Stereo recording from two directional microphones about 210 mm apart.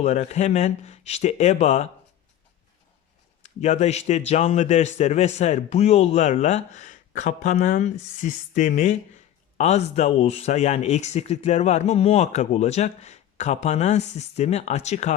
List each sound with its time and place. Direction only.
0.0 s speech: 30° left (ahead or behind)
3.4 s speech: 30° left (ahead or behind)